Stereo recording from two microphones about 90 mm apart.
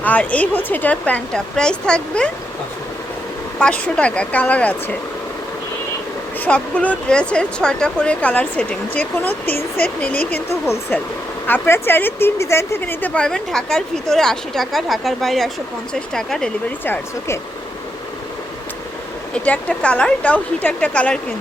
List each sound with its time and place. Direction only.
0.0 s speech: 15° left (ahead or behind)
3.6 s speech: 10° left (ahead or behind)
6.4 s speech: 15° left (ahead or behind)
11.4 s speech: 25° left (ahead or behind)
12.8 s speech: 20° left (ahead or behind)
13.2 s a woman's voice: 10° left (ahead or behind)
16.8 s speech: 25° left (ahead or behind)
19.3 s speech: 10° left (ahead or behind)